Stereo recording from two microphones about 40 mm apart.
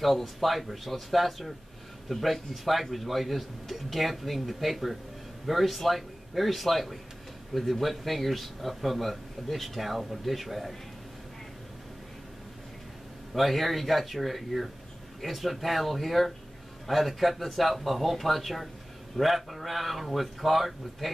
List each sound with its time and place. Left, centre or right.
0.0 s a man's voice: centre
13.3 s a man's voice: centre